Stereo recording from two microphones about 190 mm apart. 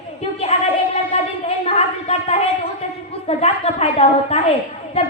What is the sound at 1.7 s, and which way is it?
Child singing, 30° left (ahead or behind).